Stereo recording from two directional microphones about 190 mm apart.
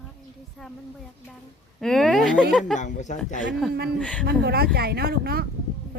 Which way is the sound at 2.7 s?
40° left (ahead or behind).